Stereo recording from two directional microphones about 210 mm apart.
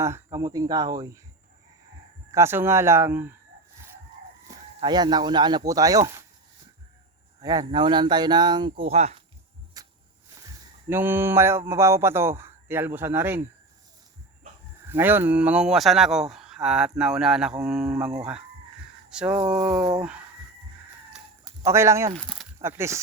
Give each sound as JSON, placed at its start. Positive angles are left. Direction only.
{"t": 0.0, "sound": "speech", "side_deg": -15}
{"t": 2.3, "sound": "speech", "side_deg": -10}
{"t": 4.4, "sound": "speech", "side_deg": -20}
{"t": 7.4, "sound": "speech", "side_deg": -20}
{"t": 8.8, "sound": "speech", "side_deg": -30}
{"t": 9.8, "sound": "a sound", "side_deg": -15}
{"t": 10.3, "sound": "speech", "side_deg": -15}
{"t": 14.8, "sound": "speech", "side_deg": -10}
{"t": 21.1, "sound": "chicken", "side_deg": -5}
{"t": 21.7, "sound": "speech", "side_deg": -15}
{"t": 22.1, "sound": "speech", "side_deg": 0}
{"t": 22.6, "sound": "speech", "side_deg": -10}